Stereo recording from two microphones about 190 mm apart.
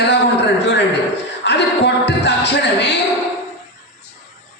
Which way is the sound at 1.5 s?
65° left (ahead or behind).